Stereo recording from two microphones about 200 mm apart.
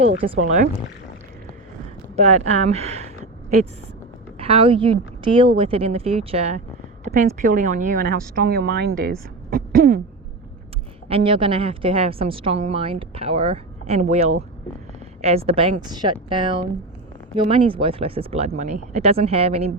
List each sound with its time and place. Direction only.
0.2 s a woman's voice: 25° right (ahead or behind)
2.1 s speech: 35° right (ahead or behind)
4.4 s a woman's voice: 30° right (ahead or behind)
7.1 s a sound: 50° right (ahead or behind)
7.4 s speech: 40° right (ahead or behind)
9.6 s a sound: 45° right (ahead or behind)
11.1 s a woman's voice: 25° right (ahead or behind)